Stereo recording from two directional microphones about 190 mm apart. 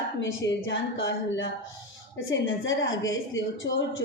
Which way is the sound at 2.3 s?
85° left.